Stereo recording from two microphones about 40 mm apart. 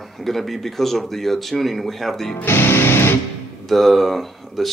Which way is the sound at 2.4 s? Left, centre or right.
Left.